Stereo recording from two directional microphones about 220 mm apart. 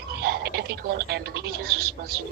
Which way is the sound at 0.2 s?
45° right (ahead or behind).